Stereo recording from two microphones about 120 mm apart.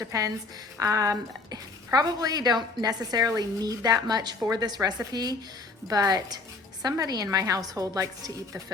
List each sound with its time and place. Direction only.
0.0 s a woman's voice: 30° right (ahead or behind)